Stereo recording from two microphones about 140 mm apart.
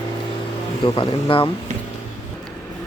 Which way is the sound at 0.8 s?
35° left (ahead or behind).